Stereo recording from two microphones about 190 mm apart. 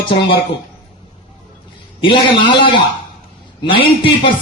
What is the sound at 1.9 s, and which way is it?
A man's voice, 25° left (ahead or behind).